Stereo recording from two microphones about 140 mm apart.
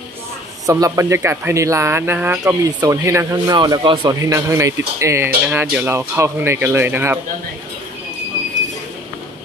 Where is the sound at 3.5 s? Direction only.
30° right (ahead or behind).